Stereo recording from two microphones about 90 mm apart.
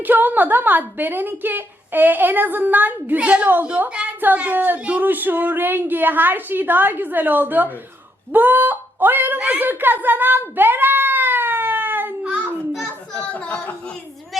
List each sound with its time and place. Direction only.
0.0 s speech: 20° right (ahead or behind)
13.1 s speech: 15° left (ahead or behind)